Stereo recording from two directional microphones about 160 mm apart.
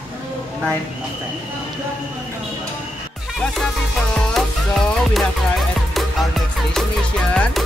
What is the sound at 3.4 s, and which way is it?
Music, centre (ahead or behind).